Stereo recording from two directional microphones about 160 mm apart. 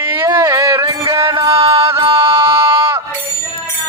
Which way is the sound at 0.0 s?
15° right (ahead or behind).